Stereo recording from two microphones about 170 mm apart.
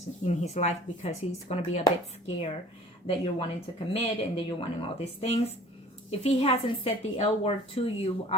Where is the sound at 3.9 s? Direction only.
35° left (ahead or behind).